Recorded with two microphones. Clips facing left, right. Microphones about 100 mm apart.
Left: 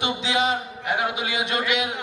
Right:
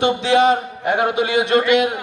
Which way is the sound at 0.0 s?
55° right (ahead or behind).